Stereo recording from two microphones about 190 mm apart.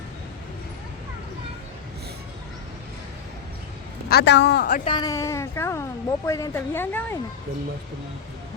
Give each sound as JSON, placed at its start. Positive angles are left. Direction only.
{"t": 4.1, "sound": "speech", "side_deg": 65}
{"t": 4.9, "sound": "a woman's voice", "side_deg": 20}